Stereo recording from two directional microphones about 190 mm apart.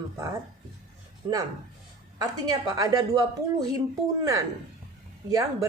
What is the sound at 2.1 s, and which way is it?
Speech, 20° right (ahead or behind).